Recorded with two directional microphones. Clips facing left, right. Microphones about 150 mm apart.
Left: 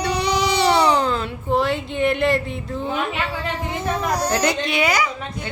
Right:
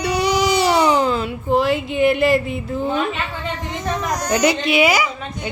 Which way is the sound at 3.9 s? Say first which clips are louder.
Right 1 dB; 30° left (ahead or behind).